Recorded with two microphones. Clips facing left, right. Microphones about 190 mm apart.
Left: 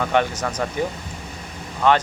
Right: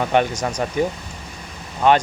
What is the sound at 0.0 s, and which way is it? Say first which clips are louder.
Speech: right 2 dB; 15° right (ahead or behind).